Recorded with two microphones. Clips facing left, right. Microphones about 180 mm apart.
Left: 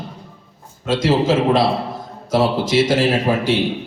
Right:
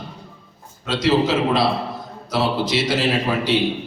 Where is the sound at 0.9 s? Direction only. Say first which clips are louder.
Left 2 dB; 45° left (ahead or behind).